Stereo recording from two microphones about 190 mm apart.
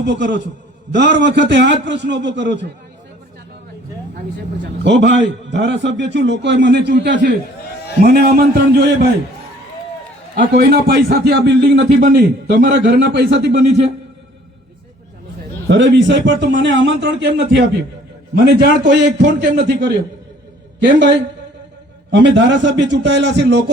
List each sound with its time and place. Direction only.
0.1 s a man's voice: 70° right (ahead or behind)
4.6 s a man's voice: 65° right (ahead or behind)
10.3 s a man's voice: 60° right (ahead or behind)
11.9 s a man's voice: 50° right (ahead or behind); by 13.7 s 65° right (ahead or behind)
15.6 s a man's voice: 65° right (ahead or behind)